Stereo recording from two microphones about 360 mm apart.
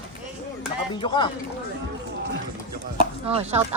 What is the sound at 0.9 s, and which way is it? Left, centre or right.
Speech, centre.